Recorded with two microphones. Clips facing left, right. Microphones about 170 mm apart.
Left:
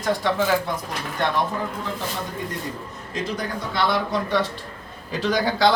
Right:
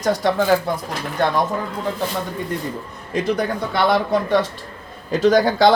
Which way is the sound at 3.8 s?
55° right (ahead or behind).